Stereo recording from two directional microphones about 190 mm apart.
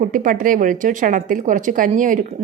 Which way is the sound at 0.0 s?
45° right (ahead or behind).